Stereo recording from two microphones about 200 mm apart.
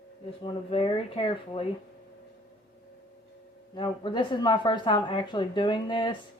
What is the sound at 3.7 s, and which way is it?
A woman's voice, 25° left (ahead or behind).